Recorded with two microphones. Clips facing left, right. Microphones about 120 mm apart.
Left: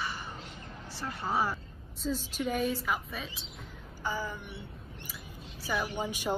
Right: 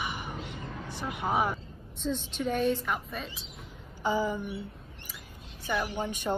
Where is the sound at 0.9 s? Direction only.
15° right (ahead or behind).